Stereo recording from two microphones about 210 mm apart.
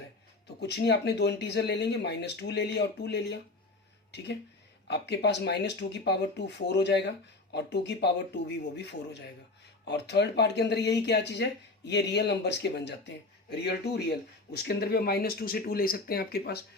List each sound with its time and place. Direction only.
0.4 s speech: 55° left (ahead or behind)